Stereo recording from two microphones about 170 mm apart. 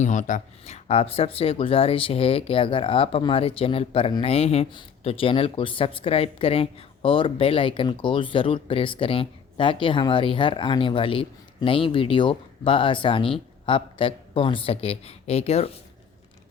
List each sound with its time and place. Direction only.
0.0 s speech: 45° left (ahead or behind)